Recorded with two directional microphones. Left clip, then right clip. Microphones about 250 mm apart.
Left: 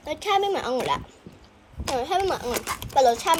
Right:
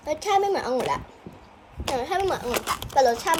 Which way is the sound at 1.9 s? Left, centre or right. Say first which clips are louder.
Left 1 dB; left.